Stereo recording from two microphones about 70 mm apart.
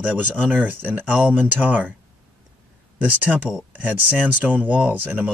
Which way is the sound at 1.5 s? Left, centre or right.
Right.